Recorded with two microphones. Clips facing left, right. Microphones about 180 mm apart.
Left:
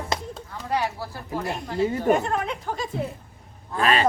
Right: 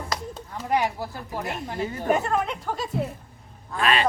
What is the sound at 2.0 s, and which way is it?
Speech, 5° right (ahead or behind).